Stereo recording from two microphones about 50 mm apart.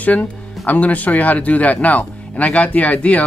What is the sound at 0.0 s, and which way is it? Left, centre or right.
Speech, left.